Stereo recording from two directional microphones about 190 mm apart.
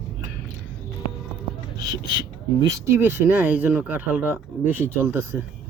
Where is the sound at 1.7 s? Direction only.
20° right (ahead or behind).